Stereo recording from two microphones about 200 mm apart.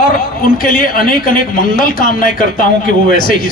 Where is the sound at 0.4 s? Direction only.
45° left (ahead or behind).